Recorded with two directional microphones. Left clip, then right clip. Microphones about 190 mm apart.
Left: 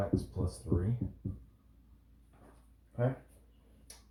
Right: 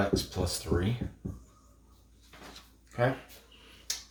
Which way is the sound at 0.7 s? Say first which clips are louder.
Right 4 dB; 55° right (ahead or behind).